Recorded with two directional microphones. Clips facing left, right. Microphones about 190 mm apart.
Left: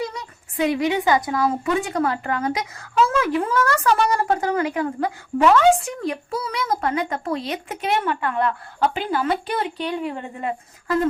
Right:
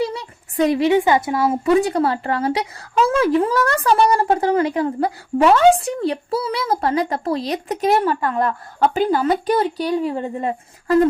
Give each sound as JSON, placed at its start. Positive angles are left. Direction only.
{"t": 0.0, "sound": "a woman's voice", "side_deg": -30}